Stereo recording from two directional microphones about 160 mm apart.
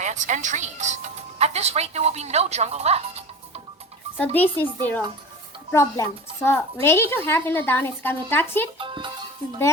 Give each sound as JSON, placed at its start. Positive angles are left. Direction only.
{"t": 0.0, "sound": "speech", "side_deg": -50}
{"t": 4.4, "sound": "a woman's voice", "side_deg": 10}
{"t": 8.8, "sound": "music", "side_deg": -30}